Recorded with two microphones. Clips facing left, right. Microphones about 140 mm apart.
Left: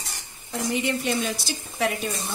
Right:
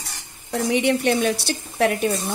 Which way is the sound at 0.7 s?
70° right (ahead or behind).